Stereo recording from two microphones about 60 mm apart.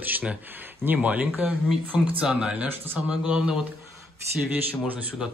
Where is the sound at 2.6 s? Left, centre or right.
Right.